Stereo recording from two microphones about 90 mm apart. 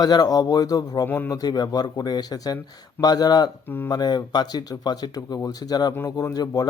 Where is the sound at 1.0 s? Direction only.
25° left (ahead or behind).